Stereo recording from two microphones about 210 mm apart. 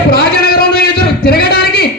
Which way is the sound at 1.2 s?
45° left (ahead or behind).